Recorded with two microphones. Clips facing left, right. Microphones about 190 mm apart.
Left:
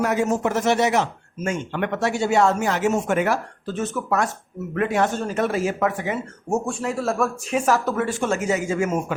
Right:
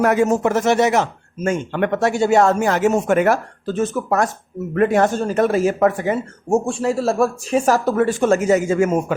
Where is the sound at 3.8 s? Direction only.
35° right (ahead or behind).